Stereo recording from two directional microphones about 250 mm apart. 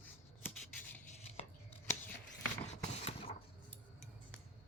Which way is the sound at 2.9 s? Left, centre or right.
Left.